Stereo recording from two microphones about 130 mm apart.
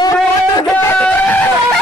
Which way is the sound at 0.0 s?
30° left (ahead or behind).